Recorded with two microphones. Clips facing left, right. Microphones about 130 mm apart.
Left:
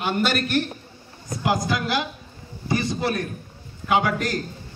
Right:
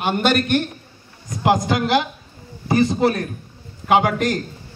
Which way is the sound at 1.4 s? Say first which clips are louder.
Right 6 dB; 25° right (ahead or behind).